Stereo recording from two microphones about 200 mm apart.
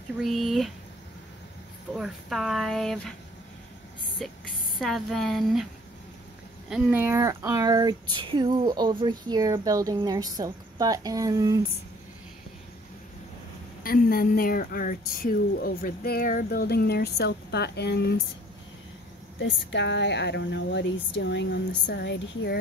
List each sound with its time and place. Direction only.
0.2 s speech: centre (ahead or behind)
2.0 s speech: centre (ahead or behind)
4.2 s speech: centre (ahead or behind)
6.7 s speech: 10° right (ahead or behind)
13.8 s speech: 45° left (ahead or behind)
19.4 s speech: 60° left (ahead or behind)